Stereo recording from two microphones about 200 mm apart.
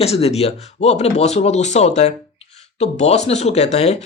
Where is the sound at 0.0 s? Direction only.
30° left (ahead or behind).